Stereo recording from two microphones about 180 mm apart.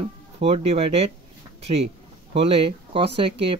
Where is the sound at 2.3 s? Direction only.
30° right (ahead or behind).